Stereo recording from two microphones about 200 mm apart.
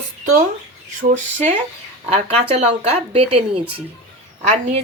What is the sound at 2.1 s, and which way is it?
Speech, 30° right (ahead or behind).